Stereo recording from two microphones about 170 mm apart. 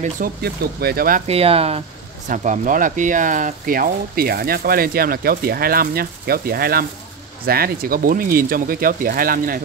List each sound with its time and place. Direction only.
0.0 s speech: 60° right (ahead or behind)
1.2 s speech: 35° right (ahead or behind)
2.2 s speech: 45° right (ahead or behind)